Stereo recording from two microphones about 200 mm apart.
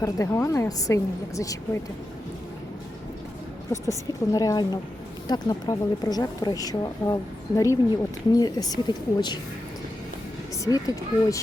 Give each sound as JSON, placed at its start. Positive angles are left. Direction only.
{"t": 0.0, "sound": "a woman's voice", "side_deg": 15}
{"t": 3.7, "sound": "a woman's voice", "side_deg": 15}
{"t": 10.6, "sound": "a woman's voice", "side_deg": 15}